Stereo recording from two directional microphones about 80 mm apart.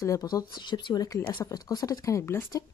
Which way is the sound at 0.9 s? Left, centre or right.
Left.